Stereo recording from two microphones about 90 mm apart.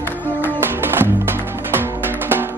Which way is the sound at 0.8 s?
25° right (ahead or behind).